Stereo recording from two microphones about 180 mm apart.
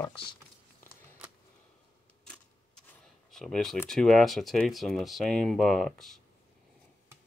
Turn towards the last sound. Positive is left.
turn(degrees=0)  # may be behind; listen again after turning